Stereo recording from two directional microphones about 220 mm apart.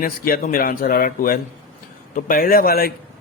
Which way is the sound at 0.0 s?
40° left (ahead or behind).